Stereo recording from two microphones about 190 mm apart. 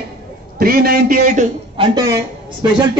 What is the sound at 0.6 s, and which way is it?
Speech, 50° right (ahead or behind).